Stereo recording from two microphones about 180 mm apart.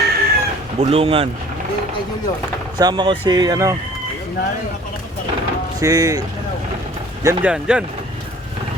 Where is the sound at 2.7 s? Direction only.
25° right (ahead or behind).